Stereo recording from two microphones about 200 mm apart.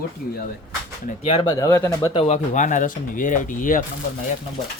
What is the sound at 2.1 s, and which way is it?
Speech, 30° left (ahead or behind).